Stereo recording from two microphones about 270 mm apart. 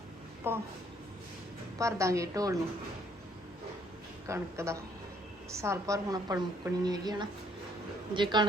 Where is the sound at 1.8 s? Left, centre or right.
Centre.